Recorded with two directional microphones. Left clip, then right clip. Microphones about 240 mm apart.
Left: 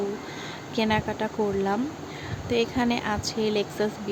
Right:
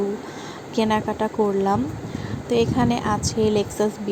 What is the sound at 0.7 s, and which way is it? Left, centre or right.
A woman's voice, centre.